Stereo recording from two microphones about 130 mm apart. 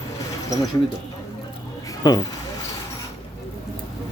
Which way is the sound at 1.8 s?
30° left (ahead or behind).